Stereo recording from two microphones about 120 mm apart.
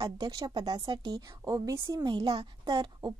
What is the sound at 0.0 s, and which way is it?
A woman's voice, 35° right (ahead or behind).